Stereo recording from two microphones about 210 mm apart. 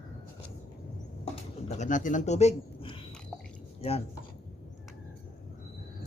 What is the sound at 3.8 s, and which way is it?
Speech, 30° left (ahead or behind).